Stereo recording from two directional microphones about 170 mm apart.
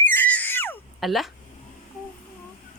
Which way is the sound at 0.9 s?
Centre (ahead or behind).